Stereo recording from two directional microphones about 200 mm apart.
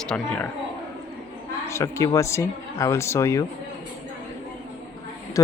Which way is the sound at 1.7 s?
15° left (ahead or behind).